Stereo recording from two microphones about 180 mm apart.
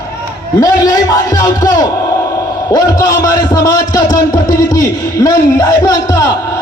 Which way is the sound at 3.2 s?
20° left (ahead or behind).